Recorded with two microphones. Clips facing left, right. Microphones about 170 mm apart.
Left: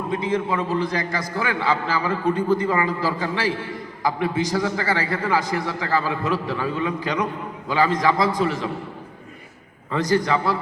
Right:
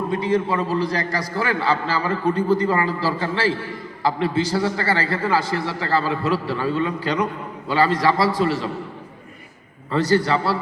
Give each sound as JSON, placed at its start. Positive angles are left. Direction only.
{"t": 0.1, "sound": "a man's voice", "side_deg": 20}
{"t": 9.9, "sound": "a man's voice", "side_deg": 15}